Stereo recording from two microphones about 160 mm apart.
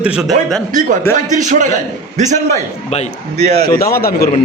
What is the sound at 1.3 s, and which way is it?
A man's voice, 50° right (ahead or behind).